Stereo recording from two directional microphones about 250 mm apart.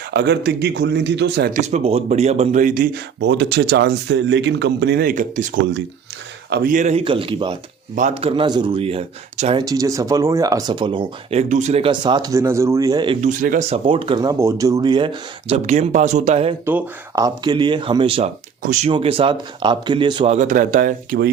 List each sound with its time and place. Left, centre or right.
0.1 s a man's voice: right
1.6 s speech: right
13.2 s speech: right
16.6 s speech: centre; by 21.2 s right